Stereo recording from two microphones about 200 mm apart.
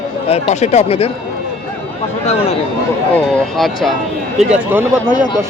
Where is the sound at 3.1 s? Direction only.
Centre (ahead or behind).